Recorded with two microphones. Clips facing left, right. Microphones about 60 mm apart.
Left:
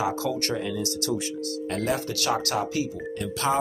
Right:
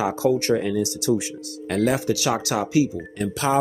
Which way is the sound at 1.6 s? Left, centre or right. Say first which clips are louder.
Right 7 dB; right.